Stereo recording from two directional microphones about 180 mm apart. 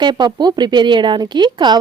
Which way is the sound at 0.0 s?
25° right (ahead or behind).